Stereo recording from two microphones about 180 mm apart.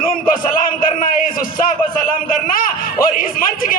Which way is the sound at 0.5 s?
50° left (ahead or behind).